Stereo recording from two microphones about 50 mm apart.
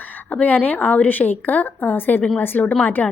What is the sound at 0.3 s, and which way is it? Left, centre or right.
A woman's voice, left.